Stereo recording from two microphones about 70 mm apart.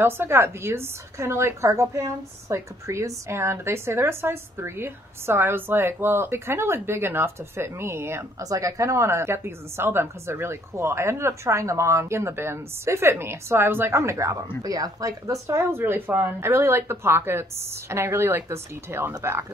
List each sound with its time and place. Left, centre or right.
0.0 s a woman's voice: right
8.4 s a woman's voice: right